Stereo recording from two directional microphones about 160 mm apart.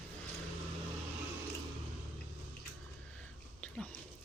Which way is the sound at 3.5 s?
10° left (ahead or behind).